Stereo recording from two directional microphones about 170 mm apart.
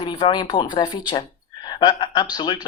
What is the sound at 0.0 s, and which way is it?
A woman's voice, 25° left (ahead or behind).